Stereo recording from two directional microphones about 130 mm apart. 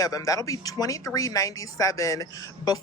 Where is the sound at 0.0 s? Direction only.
30° left (ahead or behind).